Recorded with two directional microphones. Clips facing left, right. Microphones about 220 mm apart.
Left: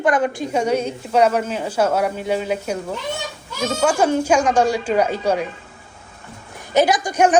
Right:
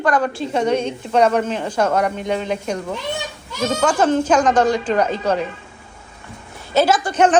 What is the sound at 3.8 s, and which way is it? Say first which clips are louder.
Speech: even; 10° left (ahead or behind).